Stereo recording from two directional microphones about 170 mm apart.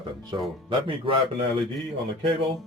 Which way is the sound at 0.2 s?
25° right (ahead or behind).